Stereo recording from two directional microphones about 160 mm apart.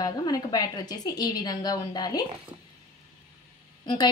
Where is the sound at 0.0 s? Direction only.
25° left (ahead or behind).